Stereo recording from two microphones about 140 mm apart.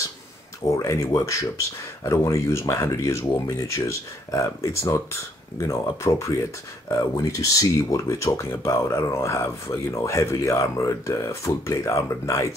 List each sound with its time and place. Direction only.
0.7 s speech: 20° left (ahead or behind)